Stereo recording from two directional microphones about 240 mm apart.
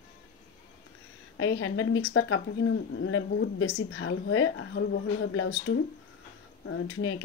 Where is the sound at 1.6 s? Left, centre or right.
Left.